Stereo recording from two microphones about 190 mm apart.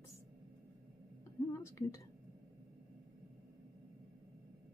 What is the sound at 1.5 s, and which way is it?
Speech, 15° left (ahead or behind).